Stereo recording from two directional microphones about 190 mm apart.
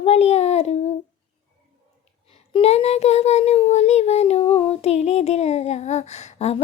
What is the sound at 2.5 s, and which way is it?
Child singing, 35° left (ahead or behind).